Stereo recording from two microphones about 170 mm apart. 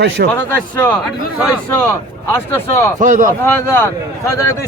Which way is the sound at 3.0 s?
50° right (ahead or behind).